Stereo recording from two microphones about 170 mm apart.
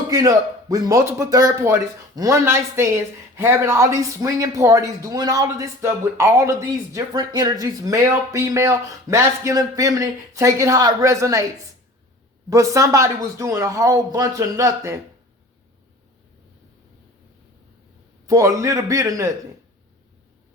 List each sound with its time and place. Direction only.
0.1 s speech: 20° right (ahead or behind)
12.5 s speech: 20° right (ahead or behind)
18.3 s speech: 20° right (ahead or behind)